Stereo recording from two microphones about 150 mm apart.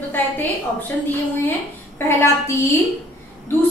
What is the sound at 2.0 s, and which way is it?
Speech, 15° left (ahead or behind).